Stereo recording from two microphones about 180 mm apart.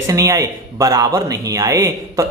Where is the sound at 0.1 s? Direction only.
15° right (ahead or behind).